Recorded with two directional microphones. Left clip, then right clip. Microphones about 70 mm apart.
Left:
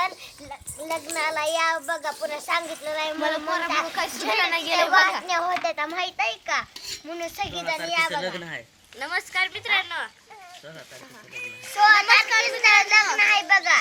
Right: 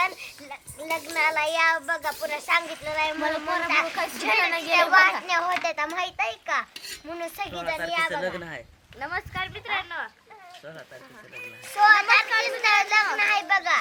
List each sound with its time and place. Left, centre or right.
0.0 s a sound: left
1.1 s a child's voice: left
5.2 s a child's voice: centre
6.0 s a woman's voice: right
8.4 s speech: right
9.0 s a child's voice: left
9.5 s a woman's voice: left
11.6 s a woman's voice: right